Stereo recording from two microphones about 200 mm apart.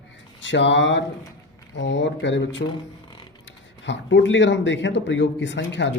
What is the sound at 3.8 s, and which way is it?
A man's voice, 60° left (ahead or behind).